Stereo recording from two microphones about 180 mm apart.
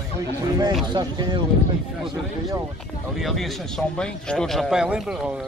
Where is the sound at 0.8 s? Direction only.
25° right (ahead or behind).